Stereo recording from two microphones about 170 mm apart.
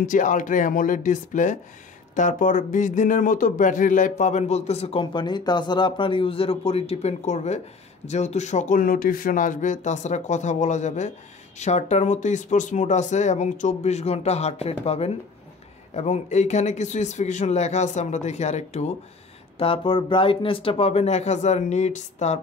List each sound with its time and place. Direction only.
0.0 s a man's voice: 50° left (ahead or behind)